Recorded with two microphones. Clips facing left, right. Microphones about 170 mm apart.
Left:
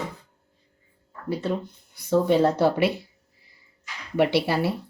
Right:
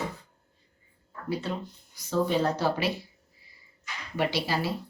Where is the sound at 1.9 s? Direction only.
65° left (ahead or behind).